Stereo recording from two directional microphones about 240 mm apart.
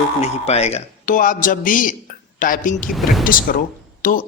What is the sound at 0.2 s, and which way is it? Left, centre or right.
Speech, left.